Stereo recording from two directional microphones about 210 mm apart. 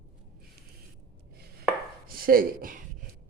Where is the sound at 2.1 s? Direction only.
45° right (ahead or behind).